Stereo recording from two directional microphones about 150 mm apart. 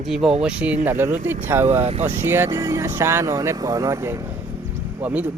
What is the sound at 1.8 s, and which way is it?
Speech, 45° right (ahead or behind).